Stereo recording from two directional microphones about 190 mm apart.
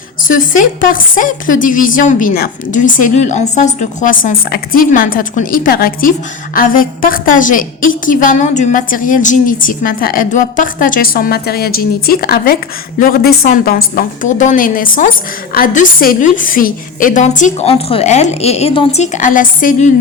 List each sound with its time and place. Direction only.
0.3 s a woman's voice: 45° left (ahead or behind)